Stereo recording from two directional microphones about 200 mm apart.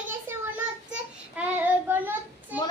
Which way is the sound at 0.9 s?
5° right (ahead or behind).